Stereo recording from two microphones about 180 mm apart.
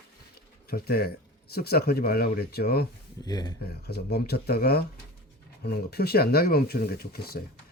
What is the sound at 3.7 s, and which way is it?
Speech, 65° left (ahead or behind).